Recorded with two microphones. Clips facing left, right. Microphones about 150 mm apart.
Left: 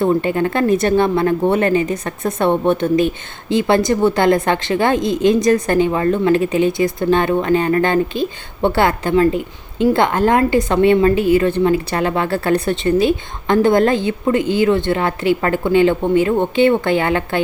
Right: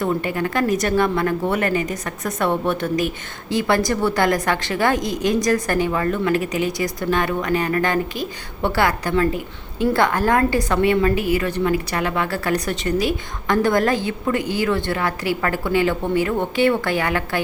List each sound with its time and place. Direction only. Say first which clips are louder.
0.0 s a woman's voice: left 6 dB; 25° left (ahead or behind)